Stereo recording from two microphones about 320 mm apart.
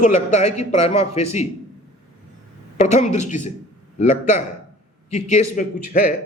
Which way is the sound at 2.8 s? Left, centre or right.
Left.